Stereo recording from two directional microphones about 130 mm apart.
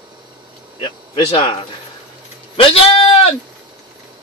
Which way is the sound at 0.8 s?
40° left (ahead or behind).